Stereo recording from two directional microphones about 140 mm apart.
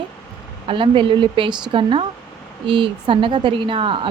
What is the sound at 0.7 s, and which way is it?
A woman's voice, 40° right (ahead or behind).